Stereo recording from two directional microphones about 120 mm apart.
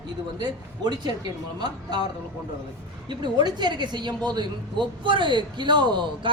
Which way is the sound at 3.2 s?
35° right (ahead or behind).